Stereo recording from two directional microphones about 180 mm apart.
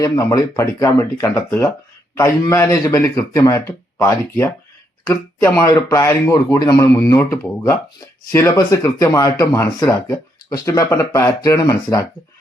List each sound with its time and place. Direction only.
0.0 s speech: 15° left (ahead or behind)